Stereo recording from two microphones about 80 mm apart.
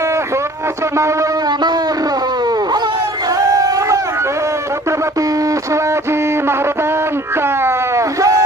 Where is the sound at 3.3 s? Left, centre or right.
Right.